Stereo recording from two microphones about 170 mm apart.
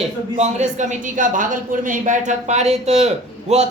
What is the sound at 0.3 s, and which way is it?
A man's voice, 45° right (ahead or behind).